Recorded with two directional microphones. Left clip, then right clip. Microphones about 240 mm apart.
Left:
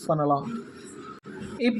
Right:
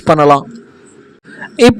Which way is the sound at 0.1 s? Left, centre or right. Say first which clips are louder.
Right 16 dB; right.